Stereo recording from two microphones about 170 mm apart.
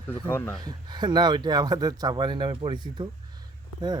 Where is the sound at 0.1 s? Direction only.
15° left (ahead or behind).